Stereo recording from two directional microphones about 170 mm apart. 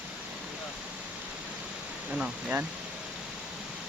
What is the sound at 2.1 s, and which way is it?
Speech, 5° right (ahead or behind).